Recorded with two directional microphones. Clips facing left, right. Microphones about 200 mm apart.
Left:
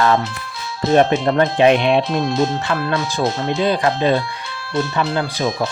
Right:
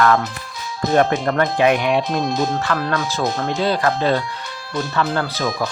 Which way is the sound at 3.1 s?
15° left (ahead or behind).